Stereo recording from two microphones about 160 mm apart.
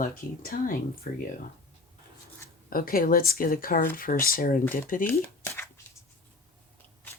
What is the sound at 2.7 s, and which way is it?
Speech, 65° left (ahead or behind).